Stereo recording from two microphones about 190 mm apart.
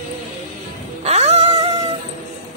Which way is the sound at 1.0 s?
35° right (ahead or behind).